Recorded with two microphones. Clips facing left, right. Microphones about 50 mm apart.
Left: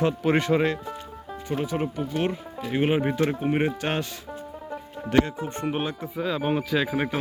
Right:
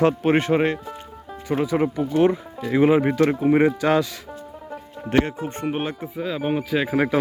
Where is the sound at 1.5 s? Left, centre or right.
Right.